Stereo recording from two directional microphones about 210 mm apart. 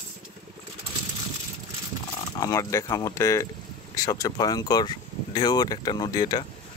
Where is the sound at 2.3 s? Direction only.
15° left (ahead or behind).